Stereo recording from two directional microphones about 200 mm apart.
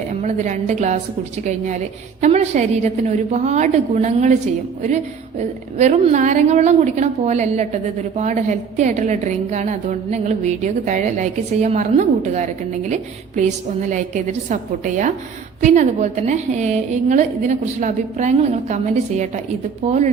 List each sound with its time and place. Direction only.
0.1 s a woman's voice: 35° right (ahead or behind)
5.4 s a woman's voice: 35° right (ahead or behind)
13.9 s a woman's voice: 40° right (ahead or behind)